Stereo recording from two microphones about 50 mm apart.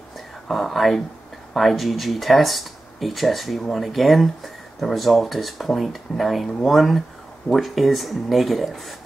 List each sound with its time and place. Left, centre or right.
0.5 s speech: centre